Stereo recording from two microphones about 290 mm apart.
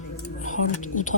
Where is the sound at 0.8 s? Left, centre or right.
Left.